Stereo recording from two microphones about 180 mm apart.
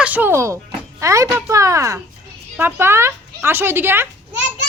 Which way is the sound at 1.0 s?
15° right (ahead or behind).